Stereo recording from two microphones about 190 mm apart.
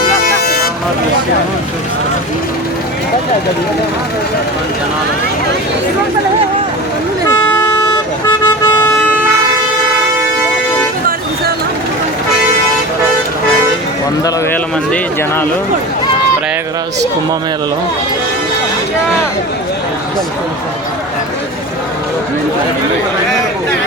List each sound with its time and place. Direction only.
0.4 s vehicle: 55° left (ahead or behind)
7.3 s vehicle: 10° left (ahead or behind)
7.9 s vehicle: 20° left (ahead or behind)
14.3 s speech: 10° left (ahead or behind)